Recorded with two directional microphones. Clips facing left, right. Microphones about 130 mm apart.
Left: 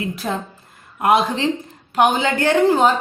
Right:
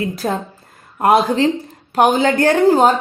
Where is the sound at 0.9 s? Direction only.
35° right (ahead or behind).